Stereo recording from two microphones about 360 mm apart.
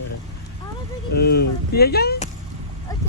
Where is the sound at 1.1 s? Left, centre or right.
Left.